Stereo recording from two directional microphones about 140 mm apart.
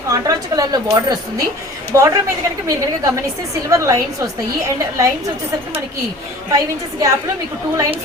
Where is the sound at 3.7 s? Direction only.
20° right (ahead or behind).